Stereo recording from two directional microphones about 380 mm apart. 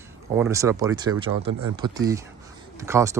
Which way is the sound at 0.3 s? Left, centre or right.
Centre.